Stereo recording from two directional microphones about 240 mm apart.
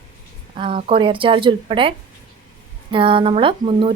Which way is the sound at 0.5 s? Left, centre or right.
Right.